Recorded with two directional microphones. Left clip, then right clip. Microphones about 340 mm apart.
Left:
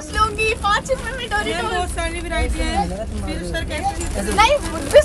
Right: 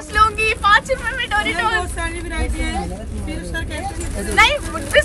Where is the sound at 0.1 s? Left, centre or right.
Centre.